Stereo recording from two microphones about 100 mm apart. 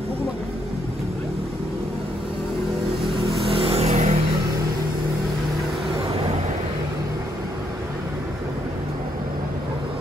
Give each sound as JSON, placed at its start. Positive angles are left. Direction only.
{"t": 3.4, "sound": "vehicle", "side_deg": -65}